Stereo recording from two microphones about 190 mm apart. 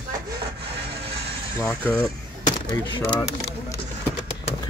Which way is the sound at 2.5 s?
25° left (ahead or behind).